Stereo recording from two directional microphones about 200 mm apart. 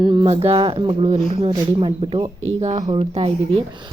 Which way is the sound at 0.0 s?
20° right (ahead or behind).